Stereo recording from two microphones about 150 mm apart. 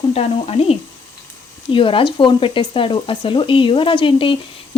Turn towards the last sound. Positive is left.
turn(degrees=35)  # may be behind; listen again after turning